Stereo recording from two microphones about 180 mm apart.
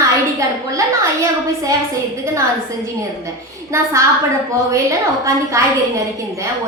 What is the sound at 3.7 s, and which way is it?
A woman's voice, 15° right (ahead or behind).